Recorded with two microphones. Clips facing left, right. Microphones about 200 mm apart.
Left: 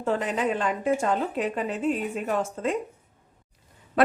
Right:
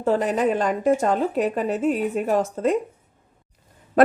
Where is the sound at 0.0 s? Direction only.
40° right (ahead or behind).